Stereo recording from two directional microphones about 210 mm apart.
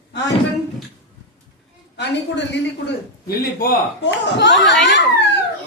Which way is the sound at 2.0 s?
55° left (ahead or behind).